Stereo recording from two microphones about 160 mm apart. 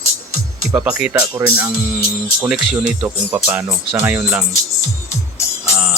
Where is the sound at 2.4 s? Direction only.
5° right (ahead or behind).